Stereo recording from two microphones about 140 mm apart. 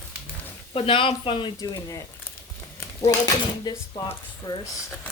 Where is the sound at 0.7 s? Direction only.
40° left (ahead or behind).